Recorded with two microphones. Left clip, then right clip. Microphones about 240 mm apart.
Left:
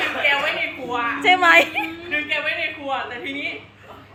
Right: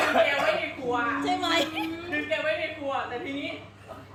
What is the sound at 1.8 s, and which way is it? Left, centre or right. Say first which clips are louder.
Speech: left 7 dB; centre.